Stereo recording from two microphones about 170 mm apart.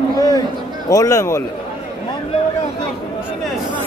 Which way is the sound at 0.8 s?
20° left (ahead or behind).